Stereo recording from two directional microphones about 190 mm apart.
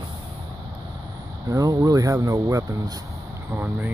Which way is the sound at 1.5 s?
15° right (ahead or behind).